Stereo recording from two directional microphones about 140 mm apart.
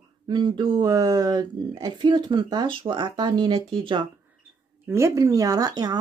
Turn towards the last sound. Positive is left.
turn(degrees=-30)  # may be behind; listen again after turning